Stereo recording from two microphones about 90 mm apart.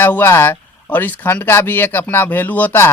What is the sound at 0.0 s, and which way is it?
Speech, 25° left (ahead or behind).